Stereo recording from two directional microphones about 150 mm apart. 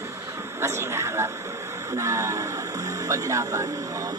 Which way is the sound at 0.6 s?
20° right (ahead or behind).